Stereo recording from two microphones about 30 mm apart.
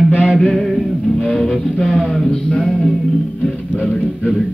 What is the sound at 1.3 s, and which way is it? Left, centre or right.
Music, centre.